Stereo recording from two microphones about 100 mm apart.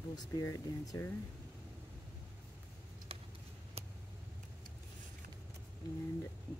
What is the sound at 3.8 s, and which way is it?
Vehicle, 85° right.